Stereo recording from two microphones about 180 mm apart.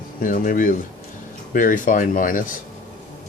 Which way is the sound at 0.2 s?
50° left (ahead or behind).